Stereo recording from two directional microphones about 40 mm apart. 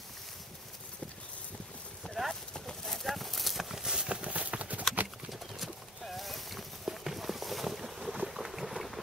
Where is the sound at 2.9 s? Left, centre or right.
Centre; by 4.2 s right.